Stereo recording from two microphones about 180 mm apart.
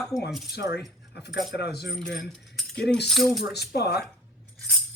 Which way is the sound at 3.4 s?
65° left (ahead or behind).